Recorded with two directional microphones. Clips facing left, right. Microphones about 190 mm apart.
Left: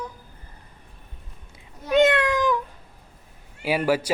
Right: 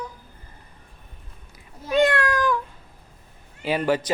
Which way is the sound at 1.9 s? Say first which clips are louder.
Left 2 dB; 20° left (ahead or behind).